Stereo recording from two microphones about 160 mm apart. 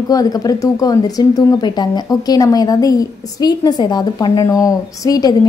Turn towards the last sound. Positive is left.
turn(degrees=25)  # may be behind; listen again after turning